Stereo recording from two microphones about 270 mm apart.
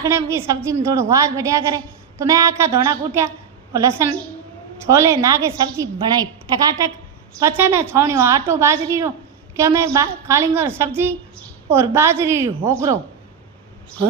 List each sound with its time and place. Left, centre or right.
0.0 s a woman's voice: centre